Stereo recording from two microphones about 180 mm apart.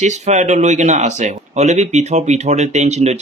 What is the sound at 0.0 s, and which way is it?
Speech, 40° right (ahead or behind).